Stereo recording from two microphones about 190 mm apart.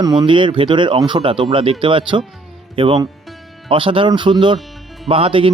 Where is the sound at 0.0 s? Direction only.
20° right (ahead or behind).